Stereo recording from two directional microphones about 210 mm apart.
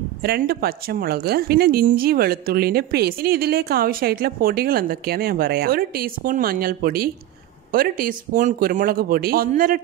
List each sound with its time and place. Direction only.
0.2 s a woman's voice: 50° right (ahead or behind)